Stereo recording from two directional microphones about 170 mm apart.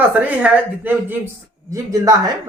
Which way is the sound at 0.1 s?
10° right (ahead or behind).